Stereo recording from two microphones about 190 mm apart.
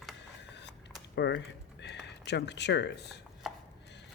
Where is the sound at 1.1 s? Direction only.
65° left (ahead or behind).